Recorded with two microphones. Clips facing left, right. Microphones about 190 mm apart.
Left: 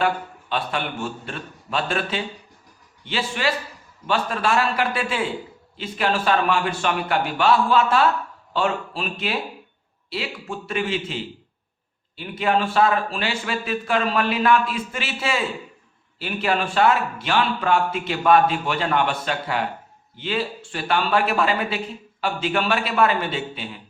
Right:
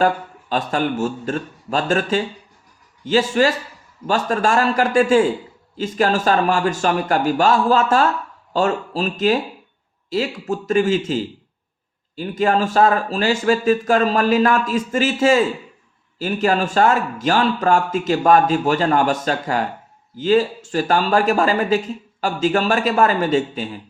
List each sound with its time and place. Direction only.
0.0 s speech: 40° right (ahead or behind)